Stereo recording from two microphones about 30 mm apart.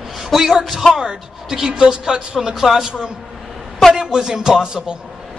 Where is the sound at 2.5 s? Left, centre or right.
Centre.